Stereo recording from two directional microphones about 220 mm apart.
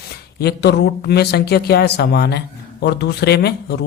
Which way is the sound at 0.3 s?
45° left (ahead or behind).